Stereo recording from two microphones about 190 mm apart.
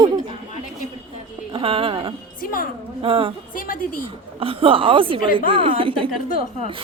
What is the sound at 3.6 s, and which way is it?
Speech, 45° left (ahead or behind).